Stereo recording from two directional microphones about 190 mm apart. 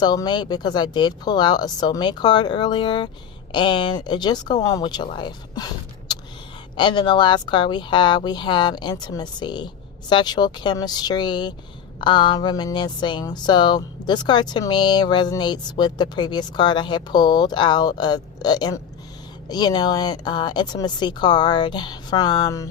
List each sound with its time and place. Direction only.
0.0 s speech: 20° left (ahead or behind)